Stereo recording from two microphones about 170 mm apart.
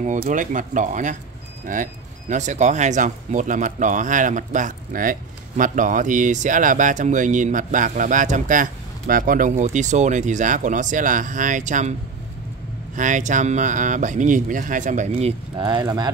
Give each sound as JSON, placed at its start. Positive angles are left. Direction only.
{"t": 0.3, "sound": "speech", "side_deg": -50}
{"t": 12.9, "sound": "speech", "side_deg": -50}